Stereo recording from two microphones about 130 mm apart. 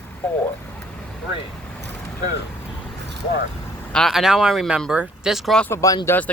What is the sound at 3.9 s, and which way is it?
Speech, centre (ahead or behind).